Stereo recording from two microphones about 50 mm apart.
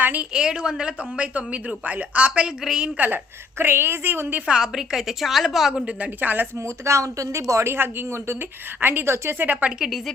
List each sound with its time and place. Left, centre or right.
0.0 s a woman's voice: right
0.3 s a woman's voice: centre
3.6 s a woman's voice: right
4.5 s a woman's voice: centre
6.1 s speech: right
6.8 s a woman's voice: right
9.4 s speech: right